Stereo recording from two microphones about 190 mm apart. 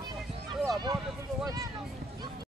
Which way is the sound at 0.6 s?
20° right (ahead or behind).